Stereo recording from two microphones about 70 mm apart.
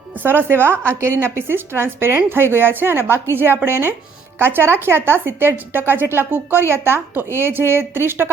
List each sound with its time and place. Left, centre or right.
0.2 s a woman's voice: right